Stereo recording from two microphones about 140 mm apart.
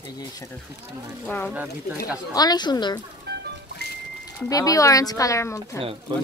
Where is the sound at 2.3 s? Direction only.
30° left (ahead or behind).